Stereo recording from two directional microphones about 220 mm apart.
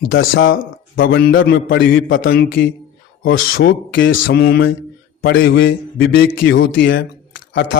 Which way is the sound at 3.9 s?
60° left (ahead or behind).